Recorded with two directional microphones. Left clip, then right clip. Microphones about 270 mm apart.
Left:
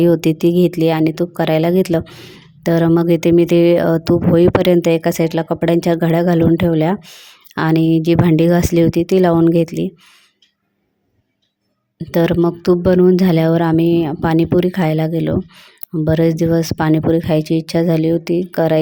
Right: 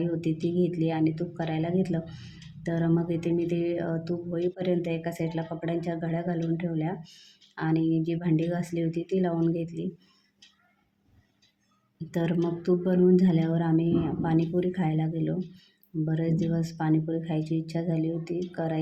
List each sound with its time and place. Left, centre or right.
0.0 s speech: left
12.1 s speech: left